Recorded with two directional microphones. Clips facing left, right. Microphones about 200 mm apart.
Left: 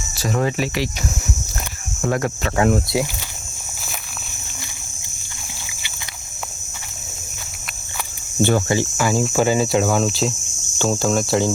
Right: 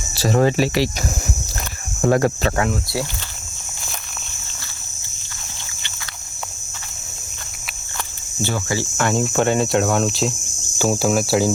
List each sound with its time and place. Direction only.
0.2 s speech: 35° right (ahead or behind)
2.0 s speech: 35° right (ahead or behind)
8.4 s speech: 55° left (ahead or behind)
8.6 s speech: 20° left (ahead or behind)
9.0 s speech: 5° left (ahead or behind)